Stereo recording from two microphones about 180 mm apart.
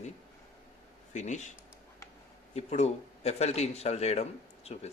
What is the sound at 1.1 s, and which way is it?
Speech, 40° left (ahead or behind).